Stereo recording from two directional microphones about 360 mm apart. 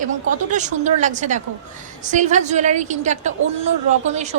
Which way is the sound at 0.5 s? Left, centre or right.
Centre.